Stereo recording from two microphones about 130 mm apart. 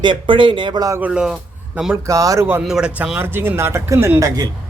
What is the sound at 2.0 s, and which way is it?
Speech, 25° right (ahead or behind).